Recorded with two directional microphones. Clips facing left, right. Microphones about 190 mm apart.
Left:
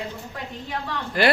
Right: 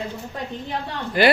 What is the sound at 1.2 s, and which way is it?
Speech, centre (ahead or behind).